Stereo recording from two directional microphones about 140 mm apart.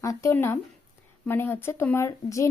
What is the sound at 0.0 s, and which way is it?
A woman's voice, 20° left (ahead or behind).